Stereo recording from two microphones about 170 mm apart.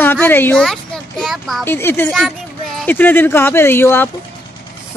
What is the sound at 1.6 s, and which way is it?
Speech, 10° left (ahead or behind).